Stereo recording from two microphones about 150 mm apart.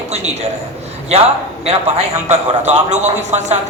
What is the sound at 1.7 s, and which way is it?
A man's voice, 45° right (ahead or behind).